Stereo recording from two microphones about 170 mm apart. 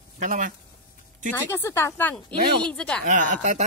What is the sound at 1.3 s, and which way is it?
Speech, 10° left (ahead or behind).